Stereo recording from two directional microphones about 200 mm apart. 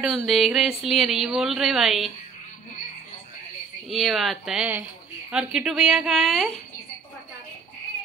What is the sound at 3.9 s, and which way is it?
Speech, centre (ahead or behind).